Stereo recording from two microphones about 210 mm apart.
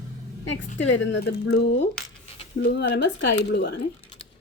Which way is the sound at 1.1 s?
50° left (ahead or behind).